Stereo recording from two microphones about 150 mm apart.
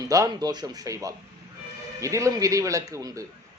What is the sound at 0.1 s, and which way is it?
A man's voice, 25° right (ahead or behind).